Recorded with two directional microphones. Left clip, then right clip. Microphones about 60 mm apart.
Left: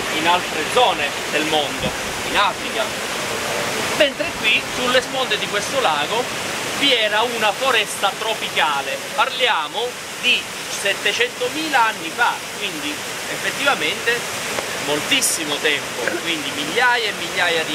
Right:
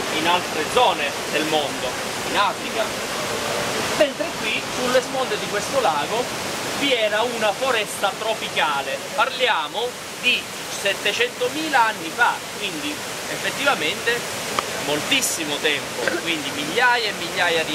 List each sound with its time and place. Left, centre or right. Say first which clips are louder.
0.2 s speech: left 3 dB; left
3.9 s speech: left 3 dB; left
9.2 s speech: left 2 dB; left; by 12.4 s centre
13.6 s speech: left 2 dB; centre